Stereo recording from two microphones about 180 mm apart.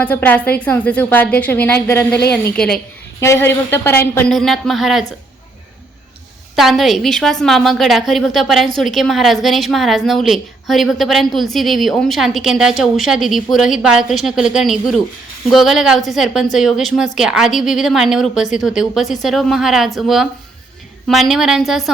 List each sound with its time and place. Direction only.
0.0 s a woman's voice: 10° left (ahead or behind)
6.6 s a woman's voice: centre (ahead or behind)